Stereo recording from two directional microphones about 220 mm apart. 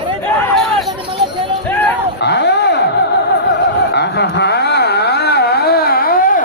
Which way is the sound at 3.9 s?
50° left (ahead or behind).